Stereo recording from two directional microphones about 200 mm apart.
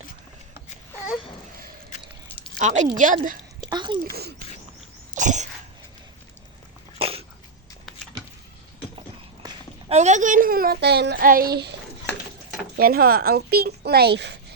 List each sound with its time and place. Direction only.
2.6 s a woman's voice: 35° right (ahead or behind)
3.7 s speech: 20° right (ahead or behind)
4.0 s speech: 50° right (ahead or behind)
5.1 s cough: 35° right (ahead or behind)
7.0 s dog: 30° right (ahead or behind)
9.9 s speech: 35° right (ahead or behind); by 11.7 s 50° right (ahead or behind)
12.7 s speech: 50° right (ahead or behind)